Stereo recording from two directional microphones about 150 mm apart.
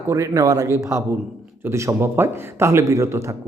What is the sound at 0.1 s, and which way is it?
A man's voice, 20° right (ahead or behind).